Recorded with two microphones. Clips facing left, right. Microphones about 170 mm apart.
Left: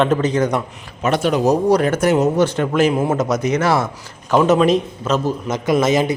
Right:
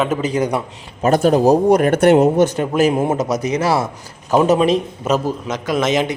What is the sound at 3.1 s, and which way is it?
Speech, 35° right (ahead or behind).